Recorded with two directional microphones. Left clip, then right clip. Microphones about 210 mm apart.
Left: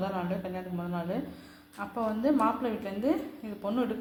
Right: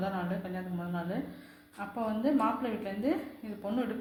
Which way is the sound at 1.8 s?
25° left (ahead or behind).